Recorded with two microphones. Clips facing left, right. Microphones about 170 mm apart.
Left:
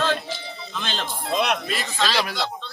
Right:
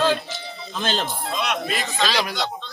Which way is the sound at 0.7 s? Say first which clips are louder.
Right 6 dB; 40° right (ahead or behind).